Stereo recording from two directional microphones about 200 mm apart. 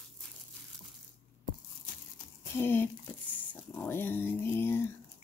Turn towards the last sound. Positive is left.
turn(degrees=10)  # may be behind; listen again after turning